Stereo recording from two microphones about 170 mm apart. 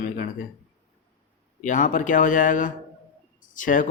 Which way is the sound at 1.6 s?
50° left (ahead or behind).